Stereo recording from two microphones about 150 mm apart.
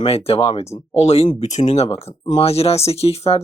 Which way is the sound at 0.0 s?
40° left (ahead or behind).